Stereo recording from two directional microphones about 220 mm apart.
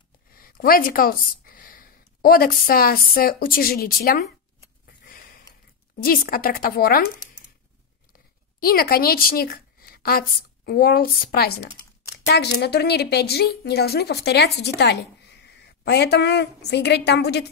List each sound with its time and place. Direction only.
0.4 s speech: 40° left (ahead or behind)
5.0 s a sound: 40° left (ahead or behind)
5.9 s a woman's voice: 40° left (ahead or behind)
8.5 s a woman's voice: 45° left (ahead or behind)